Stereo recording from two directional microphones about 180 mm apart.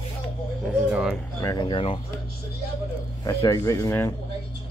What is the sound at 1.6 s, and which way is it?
Speech, 30° left (ahead or behind).